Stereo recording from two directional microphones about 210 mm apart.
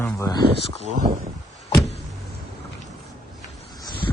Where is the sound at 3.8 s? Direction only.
20° left (ahead or behind).